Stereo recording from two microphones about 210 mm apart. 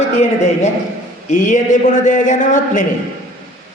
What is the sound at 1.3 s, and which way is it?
Speech, 35° left (ahead or behind).